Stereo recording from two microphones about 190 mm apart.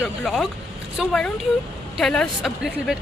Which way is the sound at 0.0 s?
Centre (ahead or behind).